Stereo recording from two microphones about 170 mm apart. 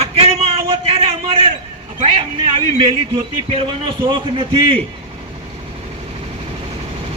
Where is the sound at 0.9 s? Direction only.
35° right (ahead or behind).